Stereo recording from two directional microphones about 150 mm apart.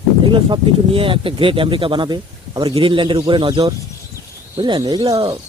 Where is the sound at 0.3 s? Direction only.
30° right (ahead or behind).